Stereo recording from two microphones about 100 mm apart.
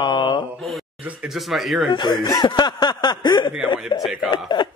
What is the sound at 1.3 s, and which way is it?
Speech, centre (ahead or behind).